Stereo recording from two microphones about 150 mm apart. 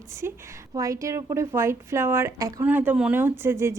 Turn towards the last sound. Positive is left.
turn(degrees=-15)  # may be behind; listen again after turning